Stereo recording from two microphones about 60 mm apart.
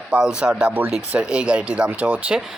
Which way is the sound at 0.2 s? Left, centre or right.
Centre.